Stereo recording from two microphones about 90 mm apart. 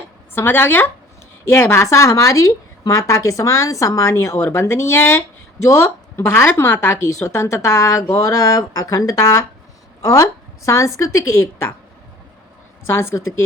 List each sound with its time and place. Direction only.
0.3 s speech: 25° left (ahead or behind)
12.9 s speech: 30° left (ahead or behind)